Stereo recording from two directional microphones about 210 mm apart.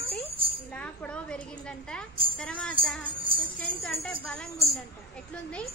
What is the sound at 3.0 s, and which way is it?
Speech, 25° right (ahead or behind).